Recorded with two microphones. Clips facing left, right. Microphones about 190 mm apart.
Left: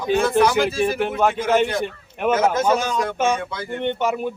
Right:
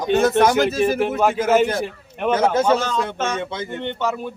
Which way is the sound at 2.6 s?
10° left (ahead or behind).